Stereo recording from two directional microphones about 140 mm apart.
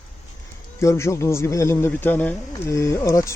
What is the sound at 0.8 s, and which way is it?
Speech, 20° left (ahead or behind).